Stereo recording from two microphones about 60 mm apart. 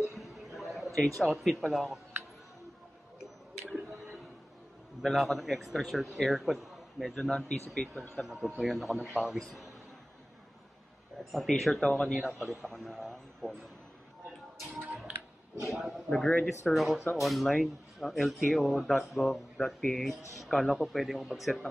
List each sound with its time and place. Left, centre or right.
0.0 s a sound: centre
5.0 s a man's voice: centre
8.2 s a man's voice: centre
11.3 s a man's voice: centre
15.6 s a man's voice: centre
16.1 s speech: centre
16.4 s a man's voice: centre